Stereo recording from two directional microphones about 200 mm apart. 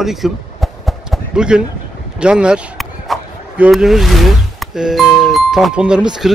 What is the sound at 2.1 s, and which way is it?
Speech, 5° right (ahead or behind).